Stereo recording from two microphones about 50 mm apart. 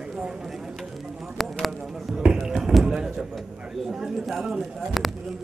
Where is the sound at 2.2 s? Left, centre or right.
Centre.